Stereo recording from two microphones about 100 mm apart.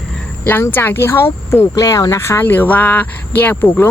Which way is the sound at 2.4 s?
20° left (ahead or behind).